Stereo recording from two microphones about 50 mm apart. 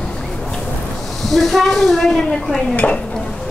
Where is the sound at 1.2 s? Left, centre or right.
Centre.